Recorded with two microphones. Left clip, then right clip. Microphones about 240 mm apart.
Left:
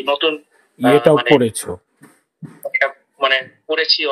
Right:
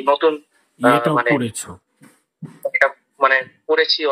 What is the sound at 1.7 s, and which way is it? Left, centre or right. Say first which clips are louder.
Speech: left 12 dB; left.